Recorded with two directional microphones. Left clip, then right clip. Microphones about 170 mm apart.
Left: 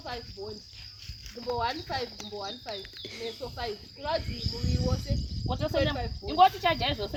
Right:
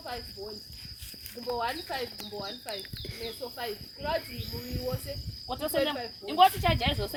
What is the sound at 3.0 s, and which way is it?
Speech, centre (ahead or behind).